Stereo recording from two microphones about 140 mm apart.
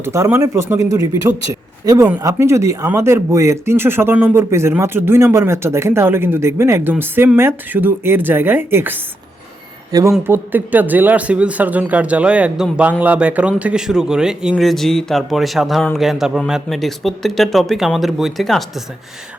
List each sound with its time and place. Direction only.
0.0 s a man's voice: 20° right (ahead or behind); by 18.6 s centre (ahead or behind)